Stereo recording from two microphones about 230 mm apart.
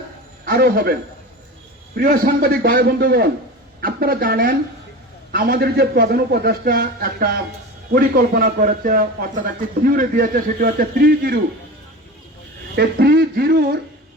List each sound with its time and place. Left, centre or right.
0.4 s a man's voice: right
2.0 s a man's voice: right
12.7 s speech: right